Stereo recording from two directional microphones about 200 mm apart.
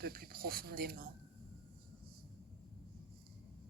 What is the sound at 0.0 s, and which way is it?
A woman's voice, 50° right (ahead or behind).